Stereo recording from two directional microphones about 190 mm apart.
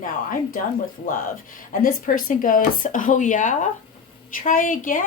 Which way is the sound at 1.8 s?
50° left (ahead or behind).